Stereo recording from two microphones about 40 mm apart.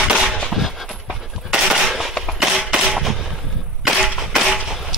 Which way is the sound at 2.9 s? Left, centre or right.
Centre.